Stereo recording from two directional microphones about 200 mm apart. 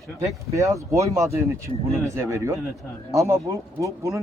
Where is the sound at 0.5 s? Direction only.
15° right (ahead or behind).